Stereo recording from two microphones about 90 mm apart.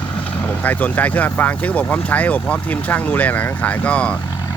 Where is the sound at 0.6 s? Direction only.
20° left (ahead or behind).